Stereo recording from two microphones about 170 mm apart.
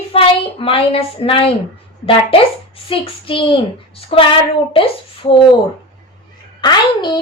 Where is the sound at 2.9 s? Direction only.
30° left (ahead or behind).